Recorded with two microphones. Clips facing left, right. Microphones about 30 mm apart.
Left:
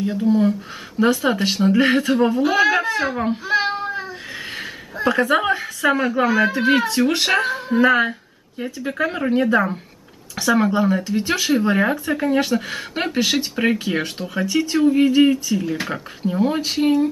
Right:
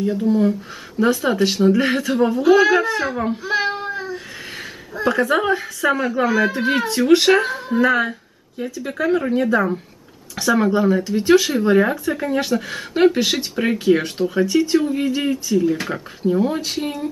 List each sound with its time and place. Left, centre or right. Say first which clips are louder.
0.0 s a woman's voice: even; centre
3.9 s a sound: right 1 dB; centre
4.9 s a woman's voice: even; centre
8.1 s a sound: even; centre
8.9 s a woman's voice: right 2 dB; centre
10.3 s a woman's voice: right 1 dB; centre